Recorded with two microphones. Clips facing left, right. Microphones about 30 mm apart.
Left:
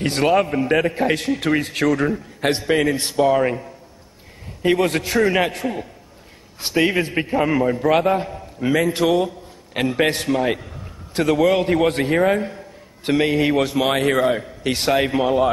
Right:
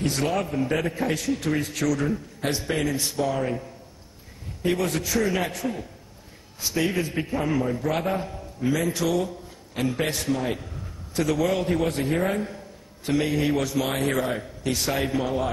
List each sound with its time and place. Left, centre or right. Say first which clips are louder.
0.0 s a man's voice: left 8 dB; left
4.6 s a man's voice: left 6 dB; left